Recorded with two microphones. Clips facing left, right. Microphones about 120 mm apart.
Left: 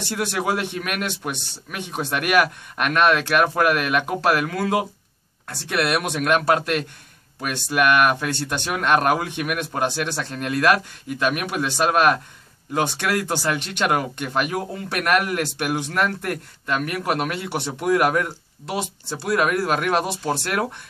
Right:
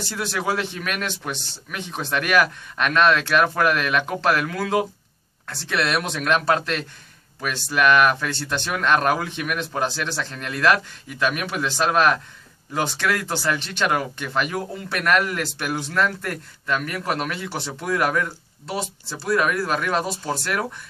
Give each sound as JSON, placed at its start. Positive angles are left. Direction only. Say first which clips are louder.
{"t": 0.1, "sound": "a man's voice", "louder": "left 2 dB", "side_deg": 20}